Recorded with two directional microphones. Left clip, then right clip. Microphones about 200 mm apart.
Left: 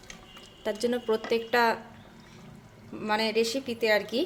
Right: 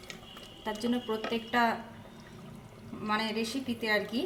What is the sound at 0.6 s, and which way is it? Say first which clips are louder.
A woman's voice: left 5 dB; 50° left (ahead or behind).